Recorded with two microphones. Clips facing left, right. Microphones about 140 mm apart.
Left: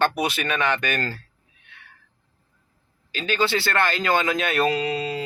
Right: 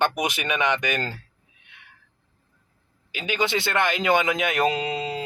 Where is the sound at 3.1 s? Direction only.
15° right (ahead or behind).